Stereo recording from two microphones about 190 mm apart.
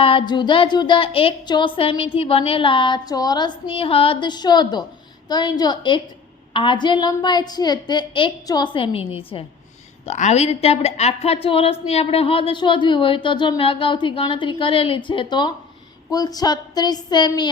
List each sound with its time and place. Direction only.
0.0 s a woman's voice: 30° left (ahead or behind)